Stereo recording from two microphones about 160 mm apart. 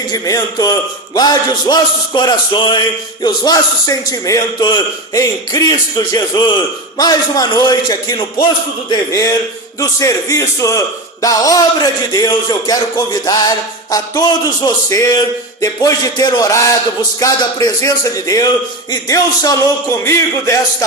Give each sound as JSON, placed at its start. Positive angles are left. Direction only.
{"t": 0.1, "sound": "a man's voice", "side_deg": 25}